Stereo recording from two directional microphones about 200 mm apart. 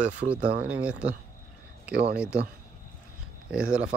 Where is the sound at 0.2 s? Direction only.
40° right (ahead or behind).